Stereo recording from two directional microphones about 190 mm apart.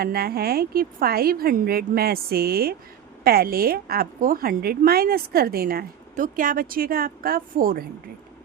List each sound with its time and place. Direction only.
0.0 s a woman's voice: 55° right (ahead or behind)